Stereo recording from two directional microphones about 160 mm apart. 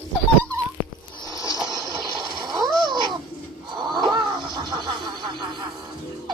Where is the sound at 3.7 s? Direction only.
30° right (ahead or behind).